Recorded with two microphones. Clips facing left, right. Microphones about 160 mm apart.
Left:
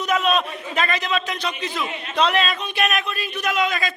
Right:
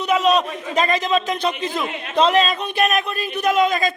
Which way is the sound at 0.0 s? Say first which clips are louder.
Right 3 dB; 30° right (ahead or behind).